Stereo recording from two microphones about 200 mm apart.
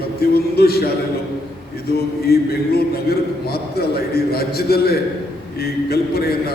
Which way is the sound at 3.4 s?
50° left (ahead or behind).